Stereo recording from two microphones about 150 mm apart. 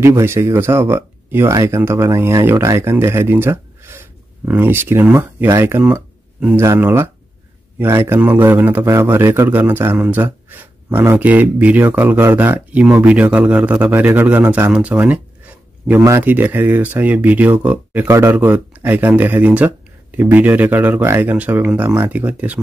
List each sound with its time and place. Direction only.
0.0 s a man's voice: 15° right (ahead or behind)